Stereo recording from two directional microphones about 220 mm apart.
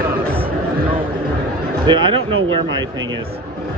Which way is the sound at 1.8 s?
20° right (ahead or behind).